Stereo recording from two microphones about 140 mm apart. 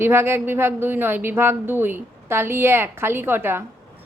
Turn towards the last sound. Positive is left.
turn(degrees=-15)  # may be behind; listen again after turning